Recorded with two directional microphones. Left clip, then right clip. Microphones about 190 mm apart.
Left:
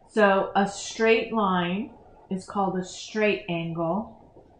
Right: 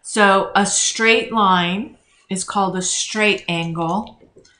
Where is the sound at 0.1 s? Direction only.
20° right (ahead or behind).